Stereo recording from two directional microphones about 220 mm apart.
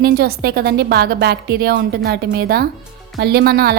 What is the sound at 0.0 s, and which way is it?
A woman's voice, 45° right (ahead or behind).